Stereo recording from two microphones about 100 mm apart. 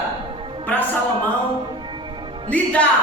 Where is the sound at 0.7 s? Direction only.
15° left (ahead or behind).